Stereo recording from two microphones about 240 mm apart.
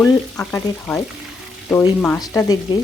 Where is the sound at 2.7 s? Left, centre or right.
Centre.